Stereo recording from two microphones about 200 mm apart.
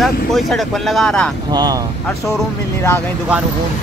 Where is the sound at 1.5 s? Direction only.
20° right (ahead or behind).